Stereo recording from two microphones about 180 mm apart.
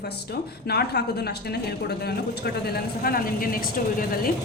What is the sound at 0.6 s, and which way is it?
A woman's voice, 65° left (ahead or behind).